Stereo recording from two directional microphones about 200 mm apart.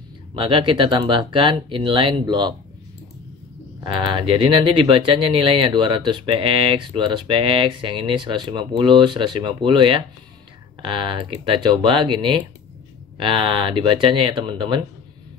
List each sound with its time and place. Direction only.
0.4 s speech: 25° right (ahead or behind)
3.8 s speech: 25° right (ahead or behind)